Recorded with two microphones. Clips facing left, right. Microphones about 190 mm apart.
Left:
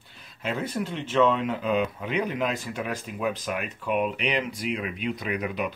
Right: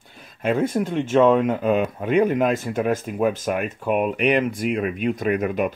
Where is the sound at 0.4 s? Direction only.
50° right (ahead or behind).